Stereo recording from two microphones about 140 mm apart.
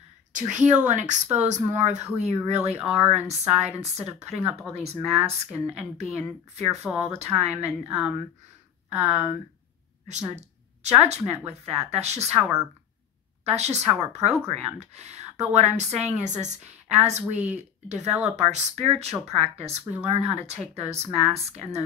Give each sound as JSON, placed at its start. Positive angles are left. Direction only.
{"t": 0.3, "sound": "a woman's voice", "side_deg": -60}
{"t": 6.8, "sound": "speech", "side_deg": -15}
{"t": 7.2, "sound": "a woman's voice", "side_deg": -50}
{"t": 10.8, "sound": "a woman's voice", "side_deg": -50}
{"t": 13.5, "sound": "a woman's voice", "side_deg": -50}